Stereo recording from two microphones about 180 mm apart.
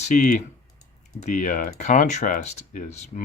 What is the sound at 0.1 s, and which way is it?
Speech, 45° left (ahead or behind).